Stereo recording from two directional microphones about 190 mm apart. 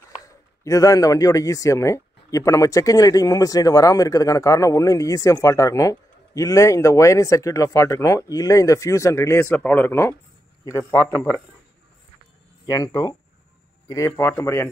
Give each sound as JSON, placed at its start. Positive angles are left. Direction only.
{"t": 0.7, "sound": "speech", "side_deg": 20}
{"t": 12.6, "sound": "speech", "side_deg": 15}